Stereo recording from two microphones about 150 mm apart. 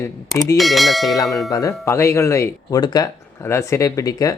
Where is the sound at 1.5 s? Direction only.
20° left (ahead or behind).